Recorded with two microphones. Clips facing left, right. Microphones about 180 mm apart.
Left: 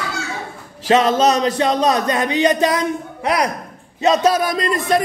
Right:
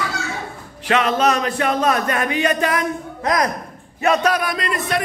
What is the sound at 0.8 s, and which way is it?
Speech, 35° left (ahead or behind).